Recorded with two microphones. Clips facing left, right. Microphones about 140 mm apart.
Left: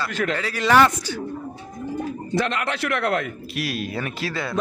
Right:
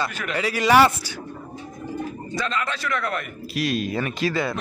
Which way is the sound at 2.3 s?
65° left (ahead or behind).